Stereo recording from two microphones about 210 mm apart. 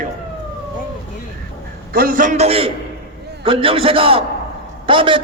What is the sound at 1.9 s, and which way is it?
A man's voice, 45° right (ahead or behind).